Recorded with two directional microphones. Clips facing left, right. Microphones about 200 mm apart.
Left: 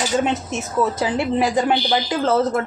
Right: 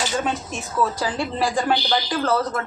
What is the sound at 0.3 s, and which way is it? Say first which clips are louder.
Speech: left 3 dB; 20° left (ahead or behind).